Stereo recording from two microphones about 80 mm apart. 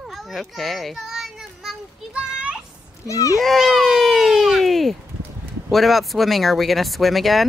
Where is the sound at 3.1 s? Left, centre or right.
Left.